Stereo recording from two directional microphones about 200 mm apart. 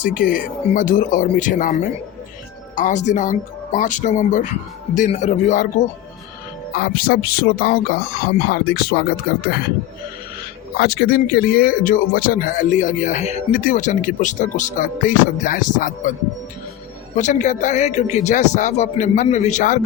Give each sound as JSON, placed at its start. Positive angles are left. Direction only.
{"t": 0.0, "sound": "speech", "side_deg": 45}
{"t": 6.7, "sound": "speech", "side_deg": 50}
{"t": 10.8, "sound": "speech", "side_deg": 50}
{"t": 17.2, "sound": "speech", "side_deg": 35}